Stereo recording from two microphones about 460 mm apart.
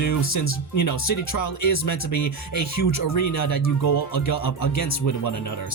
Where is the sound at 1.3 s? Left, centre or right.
Left.